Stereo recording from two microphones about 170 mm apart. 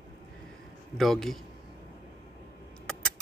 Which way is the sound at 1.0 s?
Centre (ahead or behind).